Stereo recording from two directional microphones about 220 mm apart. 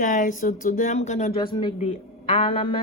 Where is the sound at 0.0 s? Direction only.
35° left (ahead or behind).